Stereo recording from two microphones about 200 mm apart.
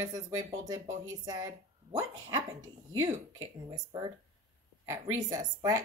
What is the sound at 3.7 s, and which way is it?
Speech, 20° right (ahead or behind).